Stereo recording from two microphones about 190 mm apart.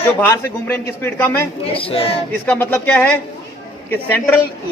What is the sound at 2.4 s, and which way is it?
A man's voice, 10° left (ahead or behind).